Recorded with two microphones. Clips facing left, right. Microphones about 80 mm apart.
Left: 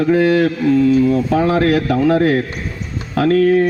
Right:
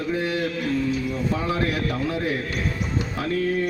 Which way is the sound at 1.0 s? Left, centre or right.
Left.